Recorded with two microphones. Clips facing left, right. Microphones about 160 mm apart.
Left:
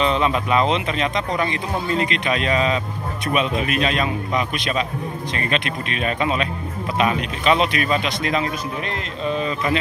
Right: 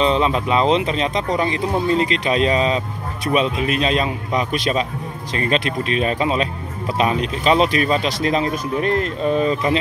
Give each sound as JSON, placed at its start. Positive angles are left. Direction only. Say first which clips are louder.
{"t": 0.0, "sound": "speech", "louder": "right 2 dB", "side_deg": -30}